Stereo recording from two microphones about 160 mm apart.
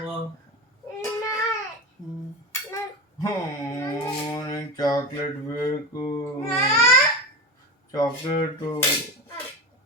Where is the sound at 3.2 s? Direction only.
20° left (ahead or behind).